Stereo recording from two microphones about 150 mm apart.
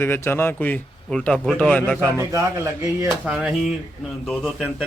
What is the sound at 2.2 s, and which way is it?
Speech, 20° right (ahead or behind).